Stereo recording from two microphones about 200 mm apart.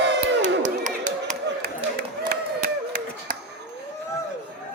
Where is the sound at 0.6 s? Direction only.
40° right (ahead or behind).